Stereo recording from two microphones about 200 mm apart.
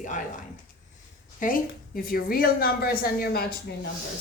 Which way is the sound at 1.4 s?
45° left (ahead or behind).